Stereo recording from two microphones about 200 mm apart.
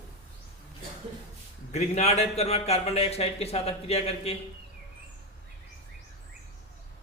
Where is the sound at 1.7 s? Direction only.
35° left (ahead or behind).